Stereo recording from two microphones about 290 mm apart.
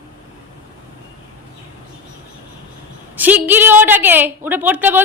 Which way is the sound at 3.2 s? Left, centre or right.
Centre.